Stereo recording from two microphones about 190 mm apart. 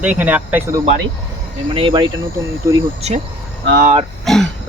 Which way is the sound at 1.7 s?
25° right (ahead or behind).